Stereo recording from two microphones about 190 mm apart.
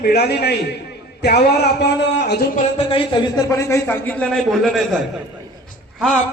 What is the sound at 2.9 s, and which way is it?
Speech, 25° left (ahead or behind).